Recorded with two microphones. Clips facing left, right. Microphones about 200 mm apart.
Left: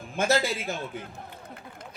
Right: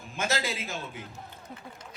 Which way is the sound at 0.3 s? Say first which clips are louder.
Left 6 dB; 55° left (ahead or behind).